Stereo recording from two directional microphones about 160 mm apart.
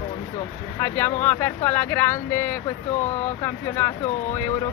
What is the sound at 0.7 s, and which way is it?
Speech, 15° left (ahead or behind).